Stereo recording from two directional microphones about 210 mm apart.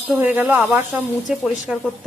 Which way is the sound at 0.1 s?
10° right (ahead or behind).